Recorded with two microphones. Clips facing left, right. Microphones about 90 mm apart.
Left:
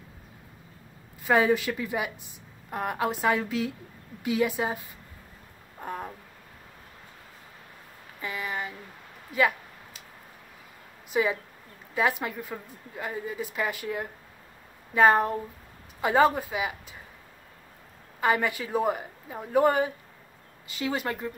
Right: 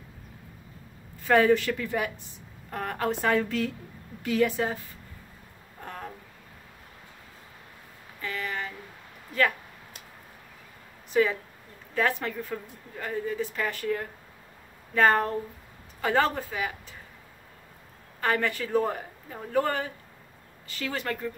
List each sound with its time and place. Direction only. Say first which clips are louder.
1.2 s a woman's voice: right 2 dB; 10° left (ahead or behind)
5.8 s a sound: left 5 dB; 15° left (ahead or behind)
8.2 s speech: even; 15° left (ahead or behind)
11.1 s a woman's voice: right 2 dB; 15° left (ahead or behind)
18.2 s a woman's voice: left 2 dB; 10° left (ahead or behind)